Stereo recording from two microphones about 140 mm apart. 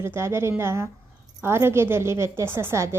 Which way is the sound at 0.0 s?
20° right (ahead or behind).